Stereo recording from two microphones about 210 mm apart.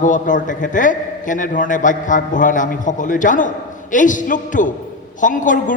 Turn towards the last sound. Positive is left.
turn(degrees=40)  # may be behind; listen again after turning